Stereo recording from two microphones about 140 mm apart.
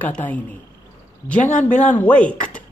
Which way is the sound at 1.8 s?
10° left (ahead or behind).